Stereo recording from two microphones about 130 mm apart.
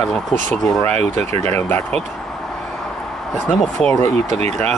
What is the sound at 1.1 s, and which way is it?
Speech, 55° right (ahead or behind).